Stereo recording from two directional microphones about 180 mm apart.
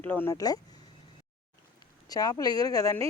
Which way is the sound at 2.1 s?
20° left (ahead or behind).